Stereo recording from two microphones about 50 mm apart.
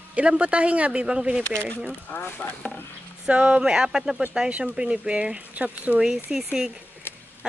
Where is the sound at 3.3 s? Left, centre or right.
Right.